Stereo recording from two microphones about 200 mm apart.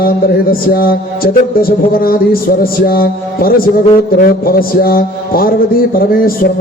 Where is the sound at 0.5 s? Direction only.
50° left (ahead or behind).